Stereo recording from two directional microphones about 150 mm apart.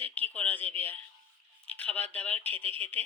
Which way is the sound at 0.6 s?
40° right (ahead or behind).